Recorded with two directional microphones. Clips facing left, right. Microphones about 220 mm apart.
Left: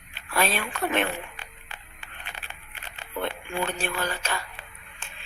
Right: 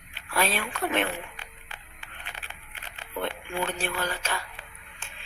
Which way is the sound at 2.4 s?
55° left (ahead or behind).